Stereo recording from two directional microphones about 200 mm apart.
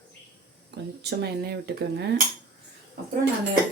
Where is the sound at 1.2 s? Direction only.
55° right (ahead or behind).